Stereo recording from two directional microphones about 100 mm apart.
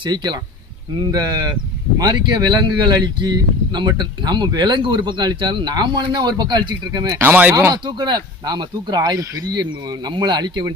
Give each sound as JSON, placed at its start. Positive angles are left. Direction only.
{"t": 0.0, "sound": "speech", "side_deg": -45}
{"t": 7.2, "sound": "speech", "side_deg": -15}
{"t": 7.7, "sound": "speech", "side_deg": -45}